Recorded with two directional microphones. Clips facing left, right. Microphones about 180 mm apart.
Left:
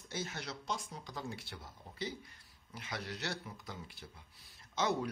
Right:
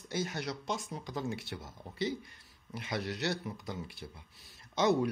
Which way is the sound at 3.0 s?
75° right (ahead or behind).